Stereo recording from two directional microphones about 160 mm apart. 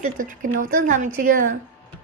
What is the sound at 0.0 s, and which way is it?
Speech, 55° right (ahead or behind).